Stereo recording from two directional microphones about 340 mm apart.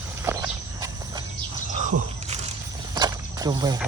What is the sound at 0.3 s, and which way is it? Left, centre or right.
Walk, centre.